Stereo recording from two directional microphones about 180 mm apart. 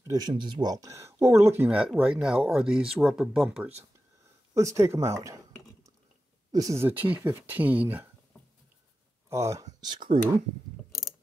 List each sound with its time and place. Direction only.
0.0 s speech: 20° right (ahead or behind)
6.5 s speech: 20° right (ahead or behind)
9.3 s speech: 15° right (ahead or behind)
9.8 s speech: 25° right (ahead or behind)